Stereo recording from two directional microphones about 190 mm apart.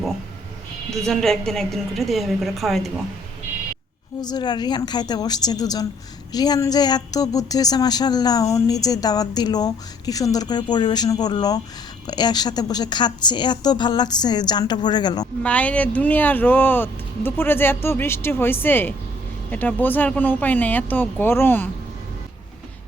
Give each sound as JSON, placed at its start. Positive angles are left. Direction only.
{"t": 1.0, "sound": "a woman's voice", "side_deg": 5}
{"t": 4.2, "sound": "a woman's voice", "side_deg": 20}
{"t": 15.4, "sound": "speech", "side_deg": 5}